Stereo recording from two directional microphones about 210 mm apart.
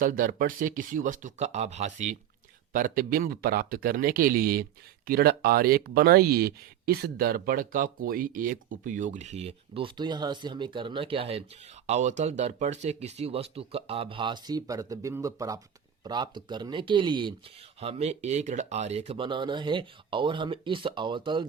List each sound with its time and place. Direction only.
0.0 s speech: 40° right (ahead or behind); by 21.4 s 20° right (ahead or behind)